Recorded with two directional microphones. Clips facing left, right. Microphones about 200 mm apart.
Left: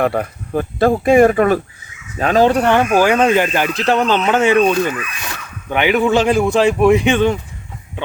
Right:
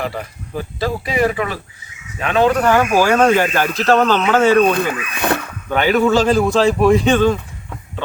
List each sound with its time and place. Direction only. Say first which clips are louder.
0.0 s speech: left 7 dB; 55° left (ahead or behind)
2.1 s a man's voice: left 2 dB; 35° left (ahead or behind); by 4.6 s 15° left (ahead or behind)
4.7 s speech: left 1 dB; 55° right (ahead or behind)
5.7 s a man's voice: even; 15° left (ahead or behind)